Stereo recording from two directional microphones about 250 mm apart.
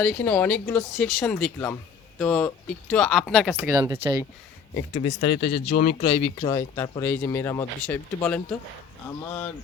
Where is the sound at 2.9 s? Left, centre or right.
Centre.